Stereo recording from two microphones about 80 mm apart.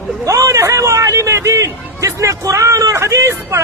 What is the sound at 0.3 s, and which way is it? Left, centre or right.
A man's voice, right.